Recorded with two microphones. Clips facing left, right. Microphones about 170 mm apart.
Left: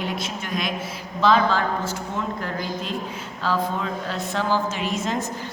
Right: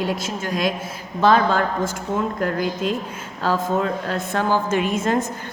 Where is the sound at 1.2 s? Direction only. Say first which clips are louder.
Right 2 dB; 50° right (ahead or behind).